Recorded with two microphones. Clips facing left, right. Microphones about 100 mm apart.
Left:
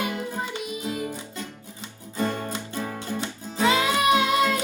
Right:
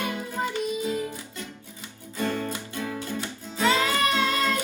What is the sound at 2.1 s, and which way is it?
Music, 25° left (ahead or behind).